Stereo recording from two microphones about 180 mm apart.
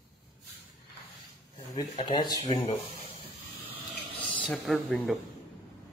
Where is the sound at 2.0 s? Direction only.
25° left (ahead or behind).